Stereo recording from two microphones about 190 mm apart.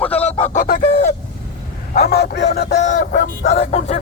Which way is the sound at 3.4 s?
35° left (ahead or behind).